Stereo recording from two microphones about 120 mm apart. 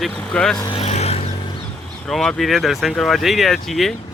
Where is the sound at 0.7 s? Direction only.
65° left (ahead or behind).